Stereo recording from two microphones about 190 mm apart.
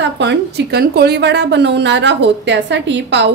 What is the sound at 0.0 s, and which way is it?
A woman's voice, 65° right (ahead or behind).